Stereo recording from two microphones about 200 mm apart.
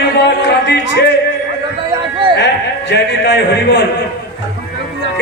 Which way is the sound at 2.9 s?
60° left (ahead or behind).